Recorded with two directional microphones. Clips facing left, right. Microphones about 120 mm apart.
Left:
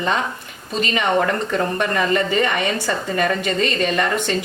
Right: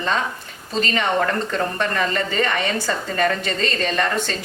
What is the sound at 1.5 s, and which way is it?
A woman's voice, 15° left (ahead or behind).